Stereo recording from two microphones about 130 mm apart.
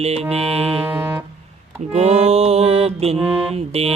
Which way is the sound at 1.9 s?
55° right (ahead or behind).